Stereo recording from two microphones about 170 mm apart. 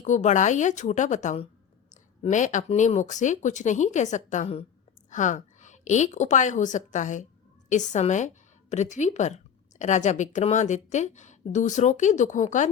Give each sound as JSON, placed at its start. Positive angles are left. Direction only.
{"t": 0.0, "sound": "a woman's voice", "side_deg": 45}